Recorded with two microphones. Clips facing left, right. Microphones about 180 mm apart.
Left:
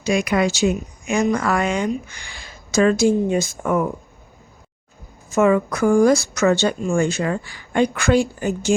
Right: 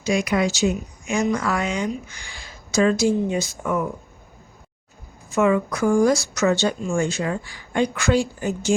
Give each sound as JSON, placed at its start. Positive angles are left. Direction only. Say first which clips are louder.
{"t": 0.0, "sound": "speech", "louder": "left 2 dB", "side_deg": 60}
{"t": 5.3, "sound": "speech", "louder": "left 3 dB", "side_deg": 50}